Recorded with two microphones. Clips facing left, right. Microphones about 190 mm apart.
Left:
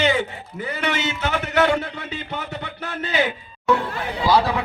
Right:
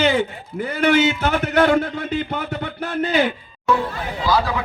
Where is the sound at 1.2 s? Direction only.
45° right (ahead or behind).